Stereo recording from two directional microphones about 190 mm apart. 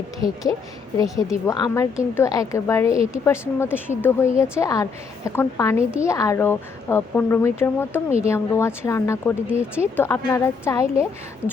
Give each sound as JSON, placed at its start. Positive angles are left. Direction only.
{"t": 0.2, "sound": "speech", "side_deg": 20}
{"t": 9.5, "sound": "speech", "side_deg": -5}
{"t": 9.9, "sound": "speech", "side_deg": 15}